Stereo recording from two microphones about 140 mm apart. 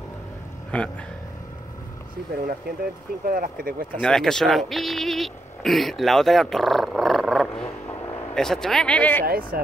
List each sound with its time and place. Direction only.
0.7 s speech: 10° left (ahead or behind)
3.3 s speech: 90° right
4.0 s speech: 5° left (ahead or behind)
9.2 s speech: 90° right